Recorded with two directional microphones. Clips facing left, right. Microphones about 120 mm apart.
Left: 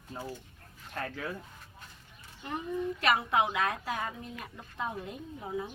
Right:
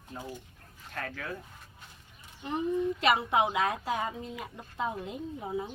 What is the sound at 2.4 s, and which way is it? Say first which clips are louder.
Speech: right 4 dB; 20° right (ahead or behind).